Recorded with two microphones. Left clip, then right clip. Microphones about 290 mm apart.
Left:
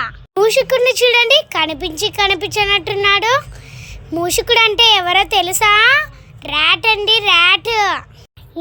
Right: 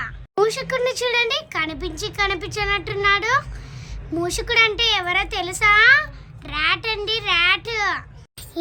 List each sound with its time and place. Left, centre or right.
0.0 s speech: centre